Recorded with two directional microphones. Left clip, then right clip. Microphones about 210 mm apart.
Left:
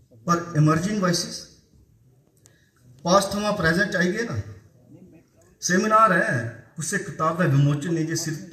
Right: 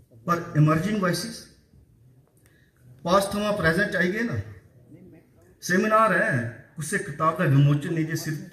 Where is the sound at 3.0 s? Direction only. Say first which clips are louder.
Left 2 dB; 50° left (ahead or behind).